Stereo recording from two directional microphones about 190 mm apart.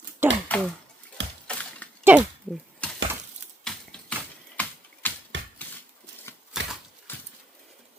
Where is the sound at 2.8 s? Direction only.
5° left (ahead or behind).